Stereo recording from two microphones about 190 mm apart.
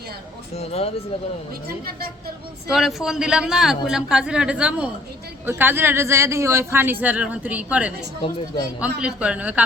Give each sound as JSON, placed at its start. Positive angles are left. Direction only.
{"t": 0.5, "sound": "speech", "side_deg": 35}
{"t": 1.6, "sound": "a woman's voice", "side_deg": -50}
{"t": 2.6, "sound": "a man's voice", "side_deg": -5}
{"t": 9.0, "sound": "speech", "side_deg": -5}